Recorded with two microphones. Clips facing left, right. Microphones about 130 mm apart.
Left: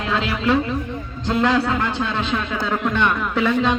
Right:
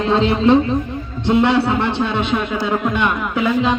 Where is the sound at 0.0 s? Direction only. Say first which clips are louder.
Right 7 dB; 30° right (ahead or behind).